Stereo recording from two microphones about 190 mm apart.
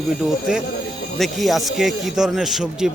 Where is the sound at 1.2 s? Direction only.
Centre (ahead or behind).